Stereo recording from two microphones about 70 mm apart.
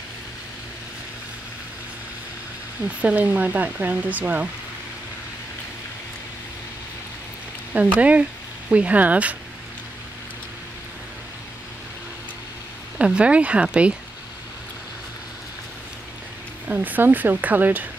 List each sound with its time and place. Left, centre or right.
2.8 s speech: right
7.7 s speech: centre
12.9 s speech: centre
16.6 s speech: right